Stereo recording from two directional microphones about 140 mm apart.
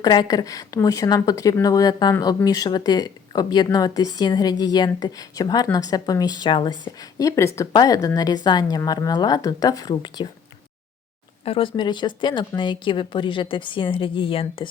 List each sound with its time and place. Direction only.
0.0 s a woman's voice: 30° left (ahead or behind)
11.4 s speech: 40° left (ahead or behind)